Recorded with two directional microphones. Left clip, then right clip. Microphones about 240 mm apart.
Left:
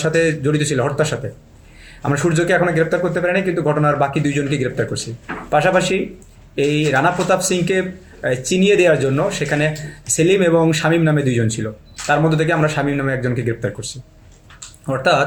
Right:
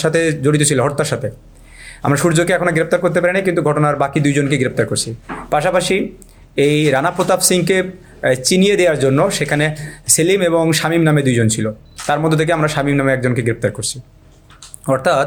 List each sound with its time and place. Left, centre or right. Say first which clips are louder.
0.0 s speech: right 2 dB; right